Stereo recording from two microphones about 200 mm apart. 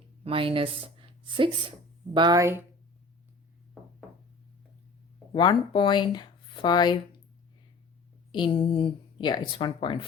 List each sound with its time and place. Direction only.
0.3 s speech: 25° right (ahead or behind)
5.3 s speech: 25° left (ahead or behind)
8.7 s speech: 25° left (ahead or behind)